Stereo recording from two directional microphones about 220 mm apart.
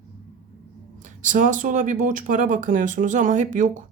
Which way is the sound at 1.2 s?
35° right (ahead or behind).